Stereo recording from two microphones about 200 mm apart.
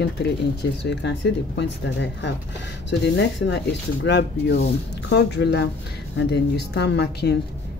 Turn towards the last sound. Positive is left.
turn(degrees=55)  # may be behind; listen again after turning